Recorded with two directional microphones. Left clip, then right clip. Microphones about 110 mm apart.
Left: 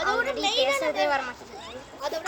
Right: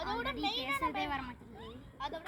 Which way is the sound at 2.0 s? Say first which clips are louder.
Left 10 dB; 40° left (ahead or behind).